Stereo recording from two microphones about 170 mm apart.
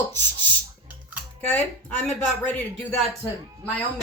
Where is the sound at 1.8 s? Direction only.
10° left (ahead or behind).